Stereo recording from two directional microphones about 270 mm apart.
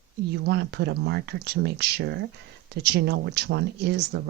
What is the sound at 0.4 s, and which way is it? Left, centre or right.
Speech, right.